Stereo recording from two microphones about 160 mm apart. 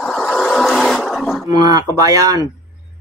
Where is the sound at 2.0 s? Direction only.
20° right (ahead or behind).